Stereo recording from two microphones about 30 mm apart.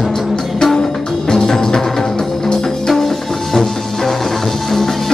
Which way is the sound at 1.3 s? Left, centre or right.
Centre.